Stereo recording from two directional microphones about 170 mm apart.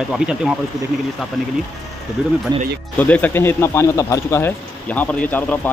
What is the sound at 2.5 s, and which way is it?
Speech, 25° right (ahead or behind).